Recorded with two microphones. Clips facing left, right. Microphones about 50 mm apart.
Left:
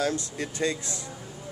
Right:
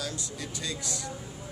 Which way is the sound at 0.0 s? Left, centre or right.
Left.